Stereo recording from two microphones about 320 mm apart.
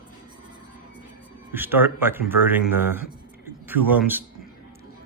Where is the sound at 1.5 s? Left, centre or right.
Centre.